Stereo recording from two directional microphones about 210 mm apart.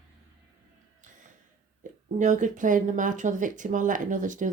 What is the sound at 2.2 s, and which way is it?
Speech, 35° right (ahead or behind).